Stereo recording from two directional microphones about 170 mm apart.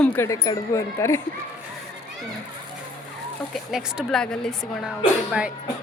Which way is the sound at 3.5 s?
5° right (ahead or behind).